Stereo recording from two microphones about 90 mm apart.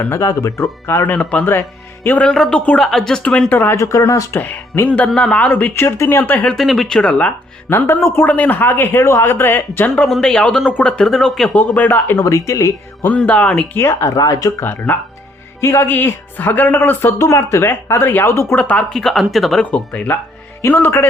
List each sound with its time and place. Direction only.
0.2 s speech: 40° left (ahead or behind)
1.0 s speech: 15° left (ahead or behind)
3.5 s speech: 25° left (ahead or behind)
4.4 s speech: 20° left (ahead or behind)
6.5 s speech: centre (ahead or behind)
7.7 s speech: 25° left (ahead or behind)
9.9 s speech: 5° left (ahead or behind)
11.5 s speech: 20° left (ahead or behind)
11.9 s speech: 35° left (ahead or behind)
13.1 s speech: 15° left (ahead or behind)
13.7 s speech: 35° left (ahead or behind)
14.6 s speech: 25° left (ahead or behind)
18.5 s speech: 15° left (ahead or behind)
19.7 s speech: 15° left (ahead or behind)